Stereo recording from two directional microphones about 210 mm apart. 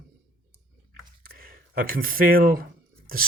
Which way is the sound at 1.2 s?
45° right (ahead or behind).